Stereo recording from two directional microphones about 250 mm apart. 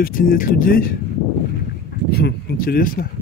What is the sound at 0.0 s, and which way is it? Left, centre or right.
Speech, left.